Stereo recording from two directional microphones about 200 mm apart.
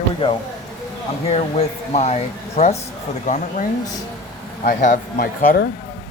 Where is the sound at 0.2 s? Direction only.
30° left (ahead or behind).